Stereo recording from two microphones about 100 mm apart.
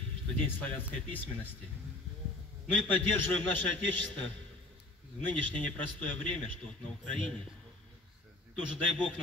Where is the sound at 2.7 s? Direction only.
20° left (ahead or behind).